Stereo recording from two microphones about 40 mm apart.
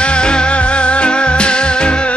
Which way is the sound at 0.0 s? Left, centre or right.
Left.